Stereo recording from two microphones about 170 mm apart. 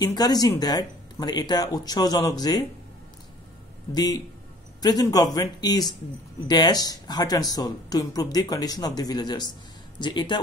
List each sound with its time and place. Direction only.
0.0 s speech: 25° left (ahead or behind)
3.9 s speech: 25° left (ahead or behind)